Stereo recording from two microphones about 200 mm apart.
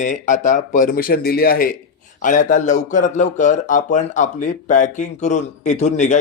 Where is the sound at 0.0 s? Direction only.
40° left (ahead or behind).